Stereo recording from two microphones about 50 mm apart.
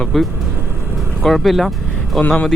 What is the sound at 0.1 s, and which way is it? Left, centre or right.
Speech, centre.